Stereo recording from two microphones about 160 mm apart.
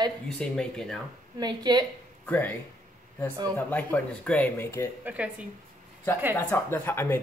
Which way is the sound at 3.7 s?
10° left (ahead or behind).